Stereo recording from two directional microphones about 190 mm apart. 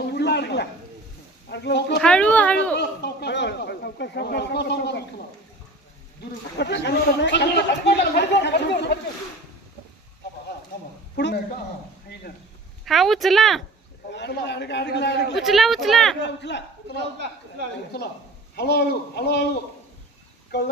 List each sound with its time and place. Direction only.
0.1 s a sound: 65° left (ahead or behind)
1.5 s speech: 65° left (ahead or behind)
2.0 s a child's voice: 5° left (ahead or behind)
2.8 s speech: 60° left (ahead or behind)
6.6 s speech: 65° left (ahead or behind)
11.1 s speech: 65° left (ahead or behind)
12.8 s speech: centre (ahead or behind)
14.1 s speech: 65° left (ahead or behind)
15.3 s speech: centre (ahead or behind)
16.2 s speech: 65° left (ahead or behind)
18.6 s speech: 60° left (ahead or behind)